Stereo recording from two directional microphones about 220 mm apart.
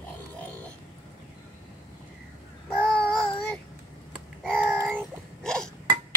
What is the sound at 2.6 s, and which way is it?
Babbling, 5° left (ahead or behind).